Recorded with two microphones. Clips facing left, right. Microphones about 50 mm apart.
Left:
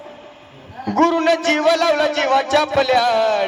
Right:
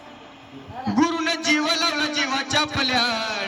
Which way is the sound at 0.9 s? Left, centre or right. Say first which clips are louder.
Left 7 dB; left.